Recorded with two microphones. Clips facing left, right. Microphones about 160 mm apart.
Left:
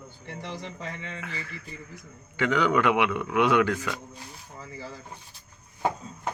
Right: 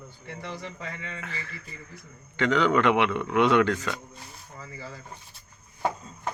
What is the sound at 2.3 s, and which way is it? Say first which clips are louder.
Speech: right 1 dB; 10° left (ahead or behind).